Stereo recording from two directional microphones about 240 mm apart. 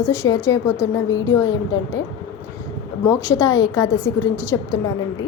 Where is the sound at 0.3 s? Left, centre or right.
Centre.